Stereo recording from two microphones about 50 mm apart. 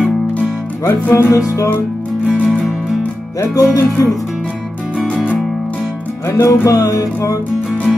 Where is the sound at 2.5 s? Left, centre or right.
Left.